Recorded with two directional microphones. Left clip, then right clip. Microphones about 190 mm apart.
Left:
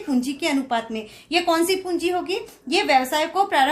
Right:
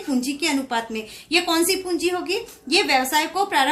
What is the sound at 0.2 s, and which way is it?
A woman's voice, 35° left (ahead or behind).